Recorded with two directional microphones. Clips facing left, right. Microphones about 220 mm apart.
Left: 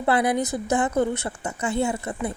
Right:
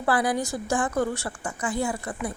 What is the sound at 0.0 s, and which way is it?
A woman's voice, 20° left (ahead or behind).